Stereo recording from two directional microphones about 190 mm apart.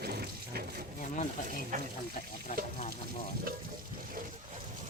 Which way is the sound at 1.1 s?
45° left (ahead or behind).